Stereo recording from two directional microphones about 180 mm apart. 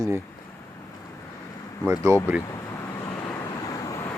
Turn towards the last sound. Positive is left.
turn(degrees=15)  # may be behind; listen again after turning